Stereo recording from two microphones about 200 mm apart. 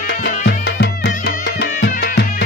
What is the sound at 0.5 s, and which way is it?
Music, 55° left (ahead or behind).